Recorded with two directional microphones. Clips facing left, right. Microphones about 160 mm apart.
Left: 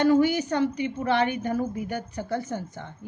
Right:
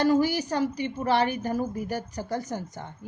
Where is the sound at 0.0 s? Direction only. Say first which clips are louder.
Left 2 dB; 35° right (ahead or behind).